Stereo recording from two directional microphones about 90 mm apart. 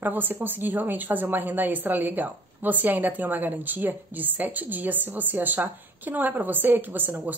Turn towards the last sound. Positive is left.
turn(degrees=-20)  # may be behind; listen again after turning